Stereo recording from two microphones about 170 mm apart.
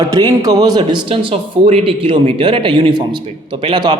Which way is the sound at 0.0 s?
25° right (ahead or behind).